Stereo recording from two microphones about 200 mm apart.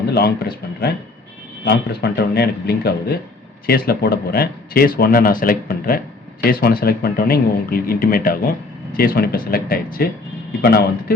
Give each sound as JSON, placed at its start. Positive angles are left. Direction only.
{"t": 0.1, "sound": "speech", "side_deg": 50}